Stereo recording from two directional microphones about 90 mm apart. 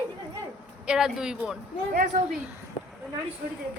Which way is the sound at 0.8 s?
5° right (ahead or behind).